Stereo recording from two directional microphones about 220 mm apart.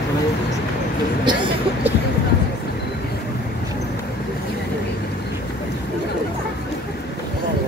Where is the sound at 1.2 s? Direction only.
20° right (ahead or behind).